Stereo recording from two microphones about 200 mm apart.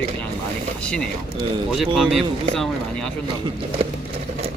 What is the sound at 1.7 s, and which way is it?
Speech, centre (ahead or behind).